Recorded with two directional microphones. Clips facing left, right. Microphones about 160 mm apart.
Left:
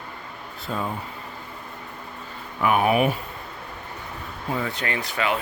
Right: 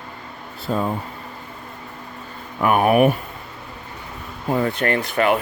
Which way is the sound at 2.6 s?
50° right (ahead or behind).